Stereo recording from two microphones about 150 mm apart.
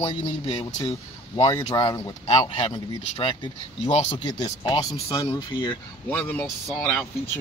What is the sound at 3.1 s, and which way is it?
Speech, 40° left (ahead or behind).